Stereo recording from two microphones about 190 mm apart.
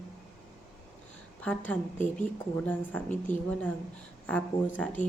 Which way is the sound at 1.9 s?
40° left (ahead or behind).